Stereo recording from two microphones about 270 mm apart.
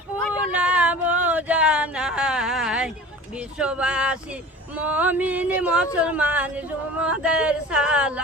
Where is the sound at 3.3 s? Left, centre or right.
Centre.